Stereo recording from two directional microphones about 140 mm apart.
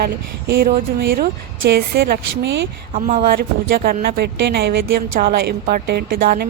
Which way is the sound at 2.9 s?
80° right.